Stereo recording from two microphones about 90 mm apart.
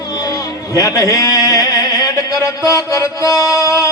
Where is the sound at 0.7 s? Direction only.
40° left (ahead or behind).